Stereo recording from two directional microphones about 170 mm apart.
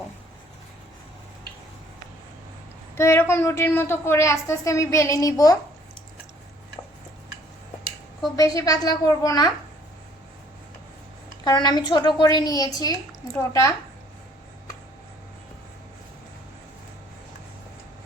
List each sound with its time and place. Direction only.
2.9 s a woman's voice: 15° left (ahead or behind)
8.4 s a woman's voice: 20° left (ahead or behind)
11.4 s a woman's voice: 25° left (ahead or behind)